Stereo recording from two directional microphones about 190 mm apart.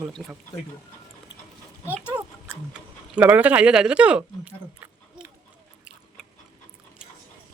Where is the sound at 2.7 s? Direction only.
10° right (ahead or behind).